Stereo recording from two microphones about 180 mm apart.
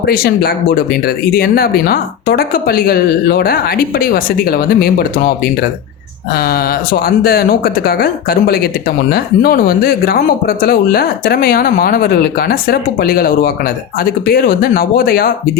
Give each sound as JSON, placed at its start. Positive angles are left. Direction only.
{"t": 0.1, "sound": "speech", "side_deg": 55}
{"t": 7.2, "sound": "speech", "side_deg": 55}